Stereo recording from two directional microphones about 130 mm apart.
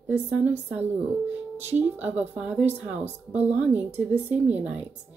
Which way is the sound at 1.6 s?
15° right (ahead or behind).